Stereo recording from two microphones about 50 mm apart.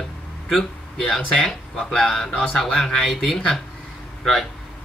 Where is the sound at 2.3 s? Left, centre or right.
Centre.